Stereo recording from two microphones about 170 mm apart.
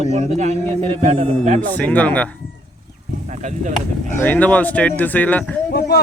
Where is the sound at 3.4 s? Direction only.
45° right (ahead or behind).